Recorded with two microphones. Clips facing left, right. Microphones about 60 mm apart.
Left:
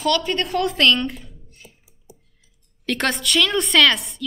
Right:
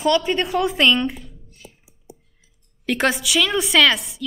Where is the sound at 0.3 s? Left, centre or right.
Centre.